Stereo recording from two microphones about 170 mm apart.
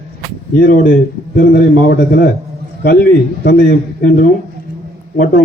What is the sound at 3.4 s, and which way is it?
Speech, 70° left (ahead or behind).